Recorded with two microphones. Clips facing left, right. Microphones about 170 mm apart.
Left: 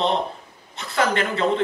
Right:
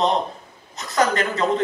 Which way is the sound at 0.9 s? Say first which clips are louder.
Right 2 dB; 40° right (ahead or behind).